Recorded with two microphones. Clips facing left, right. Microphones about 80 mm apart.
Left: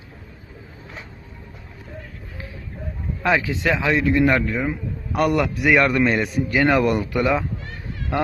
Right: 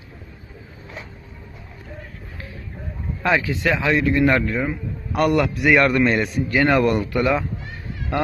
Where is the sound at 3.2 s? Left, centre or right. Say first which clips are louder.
Even; centre.